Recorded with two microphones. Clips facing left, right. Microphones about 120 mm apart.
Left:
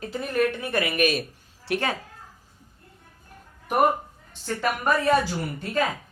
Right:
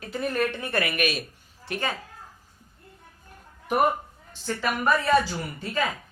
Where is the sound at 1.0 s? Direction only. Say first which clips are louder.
Left 4 dB; 45° left (ahead or behind).